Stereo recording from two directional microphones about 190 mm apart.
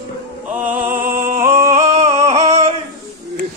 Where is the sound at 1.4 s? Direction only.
15° right (ahead or behind).